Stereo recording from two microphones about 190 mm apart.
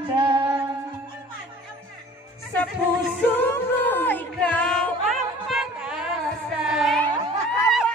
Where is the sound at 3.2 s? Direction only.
10° left (ahead or behind).